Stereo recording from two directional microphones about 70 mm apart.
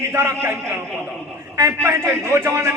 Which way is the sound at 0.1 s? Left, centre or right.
Right.